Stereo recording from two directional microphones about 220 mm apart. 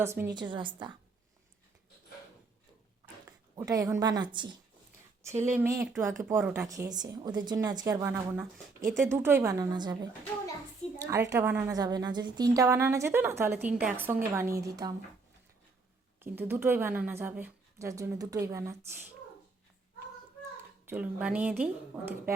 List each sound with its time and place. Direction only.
0.0 s a woman's voice: 10° right (ahead or behind)
3.5 s a woman's voice: 15° right (ahead or behind)
16.2 s a woman's voice: 10° right (ahead or behind)
20.8 s a woman's voice: 5° right (ahead or behind)